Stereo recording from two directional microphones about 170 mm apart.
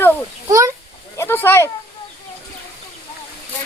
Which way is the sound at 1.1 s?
15° left (ahead or behind).